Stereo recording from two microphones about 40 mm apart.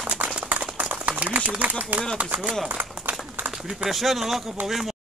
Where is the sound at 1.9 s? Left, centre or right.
Right.